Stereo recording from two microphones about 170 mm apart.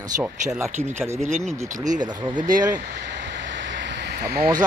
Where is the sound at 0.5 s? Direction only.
10° right (ahead or behind).